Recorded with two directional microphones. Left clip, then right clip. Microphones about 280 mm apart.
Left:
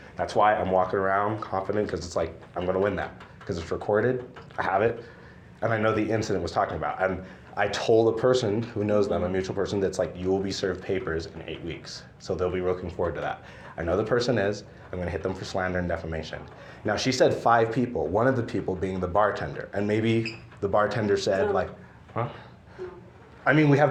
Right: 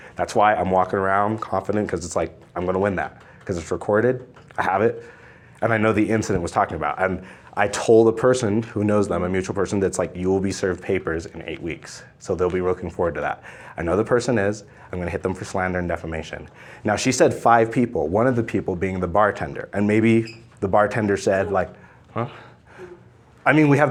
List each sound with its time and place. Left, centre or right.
0.2 s speech: right
23.4 s speech: right